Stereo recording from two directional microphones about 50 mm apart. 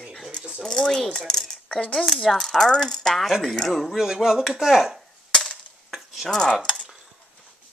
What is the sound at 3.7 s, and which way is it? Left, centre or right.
Speech, centre.